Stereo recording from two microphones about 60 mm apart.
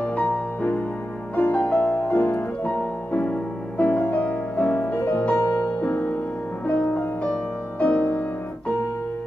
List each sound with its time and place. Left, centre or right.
1.3 s music: left
4.9 s music: left